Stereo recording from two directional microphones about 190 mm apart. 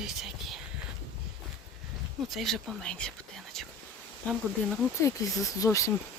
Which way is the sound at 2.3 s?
Centre (ahead or behind).